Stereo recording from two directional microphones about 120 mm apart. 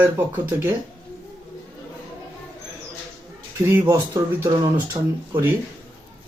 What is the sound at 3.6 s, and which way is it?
Speech, 25° right (ahead or behind).